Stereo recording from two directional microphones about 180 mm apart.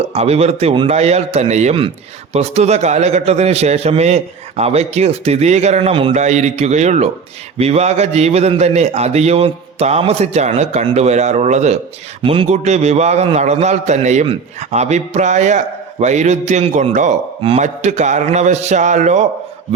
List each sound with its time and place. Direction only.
0.1 s a man's voice: 35° right (ahead or behind)